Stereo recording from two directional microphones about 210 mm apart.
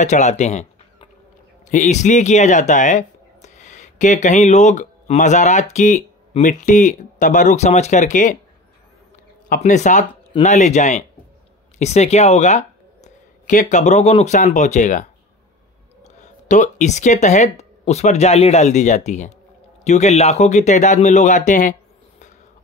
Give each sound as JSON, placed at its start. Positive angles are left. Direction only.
{"t": 0.0, "sound": "speech", "side_deg": 35}
{"t": 1.7, "sound": "speech", "side_deg": 35}
{"t": 9.5, "sound": "speech", "side_deg": 35}